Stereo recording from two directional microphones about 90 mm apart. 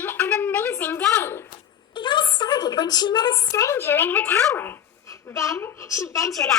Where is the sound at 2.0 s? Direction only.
60° left (ahead or behind).